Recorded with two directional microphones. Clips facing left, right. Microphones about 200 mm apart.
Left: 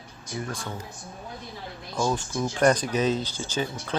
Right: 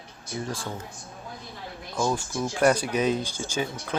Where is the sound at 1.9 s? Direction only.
5° right (ahead or behind).